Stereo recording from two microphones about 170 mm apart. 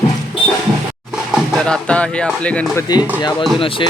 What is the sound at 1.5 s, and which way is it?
Speech, 5° left (ahead or behind).